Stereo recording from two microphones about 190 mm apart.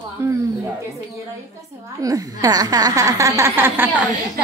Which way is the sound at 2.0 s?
20° right (ahead or behind).